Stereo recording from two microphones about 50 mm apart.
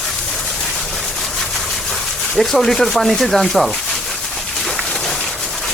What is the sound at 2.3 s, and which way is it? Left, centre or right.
Speech, centre.